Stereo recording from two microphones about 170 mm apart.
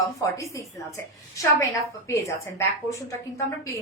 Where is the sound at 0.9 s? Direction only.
20° left (ahead or behind).